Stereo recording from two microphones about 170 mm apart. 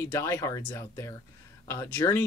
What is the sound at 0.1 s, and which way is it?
Speech, 15° left (ahead or behind).